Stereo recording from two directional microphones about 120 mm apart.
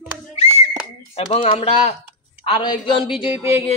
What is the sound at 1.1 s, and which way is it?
Speech, 55° left (ahead or behind).